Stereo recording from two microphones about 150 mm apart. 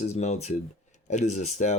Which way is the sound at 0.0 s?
50° left (ahead or behind).